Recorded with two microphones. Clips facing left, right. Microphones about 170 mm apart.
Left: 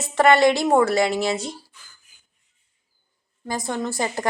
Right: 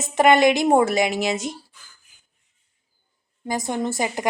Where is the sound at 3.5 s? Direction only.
20° right (ahead or behind).